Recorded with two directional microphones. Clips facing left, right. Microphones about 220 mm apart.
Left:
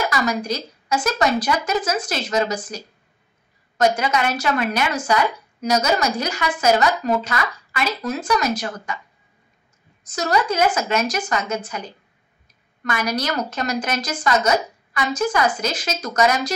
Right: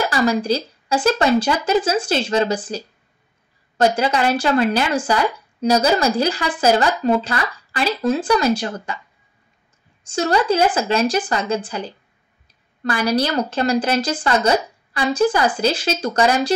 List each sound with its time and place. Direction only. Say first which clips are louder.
0.1 s a woman's voice: right 5 dB; 30° right (ahead or behind)
10.0 s speech: right 3 dB; 30° right (ahead or behind)